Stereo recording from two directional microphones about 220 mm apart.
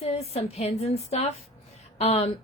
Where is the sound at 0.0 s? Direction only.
30° left (ahead or behind).